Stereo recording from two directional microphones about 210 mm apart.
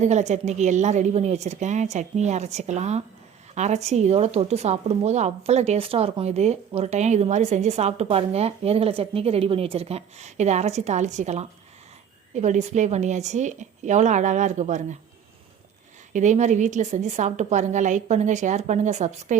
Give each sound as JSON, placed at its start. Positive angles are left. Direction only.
{"t": 0.0, "sound": "speech", "side_deg": -35}
{"t": 16.1, "sound": "speech", "side_deg": -35}